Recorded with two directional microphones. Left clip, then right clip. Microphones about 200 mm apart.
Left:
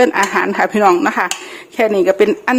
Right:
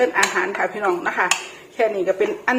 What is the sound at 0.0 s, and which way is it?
Speech, 60° left (ahead or behind).